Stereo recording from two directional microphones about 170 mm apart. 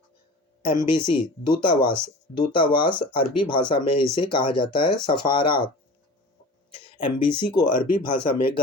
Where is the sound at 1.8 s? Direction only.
15° right (ahead or behind).